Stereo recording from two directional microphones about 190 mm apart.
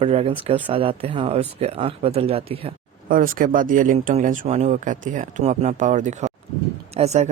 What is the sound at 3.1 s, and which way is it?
Speech, 45° right (ahead or behind).